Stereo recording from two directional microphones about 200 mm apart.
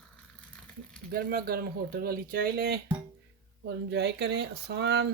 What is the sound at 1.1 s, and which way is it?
Speech, 50° right (ahead or behind).